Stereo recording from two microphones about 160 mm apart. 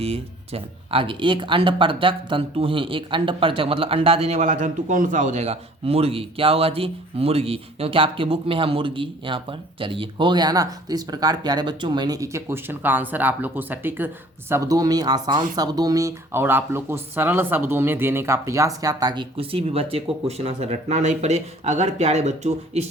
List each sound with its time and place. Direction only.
0.0 s speech: 40° right (ahead or behind)